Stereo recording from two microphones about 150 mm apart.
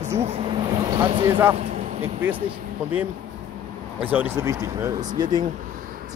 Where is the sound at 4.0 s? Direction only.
10° right (ahead or behind).